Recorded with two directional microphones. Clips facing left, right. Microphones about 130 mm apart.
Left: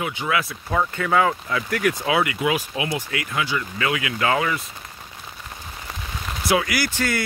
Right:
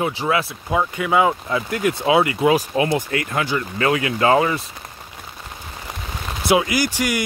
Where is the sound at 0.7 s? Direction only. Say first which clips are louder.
Right 2 dB; 10° right (ahead or behind); by 4.6 s 30° right (ahead or behind).